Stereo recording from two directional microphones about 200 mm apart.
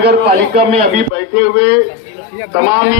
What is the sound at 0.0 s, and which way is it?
Speech, 55° right (ahead or behind).